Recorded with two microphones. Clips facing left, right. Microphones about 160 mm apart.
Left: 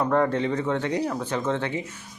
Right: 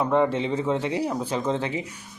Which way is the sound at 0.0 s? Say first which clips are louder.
Even; 5° right (ahead or behind).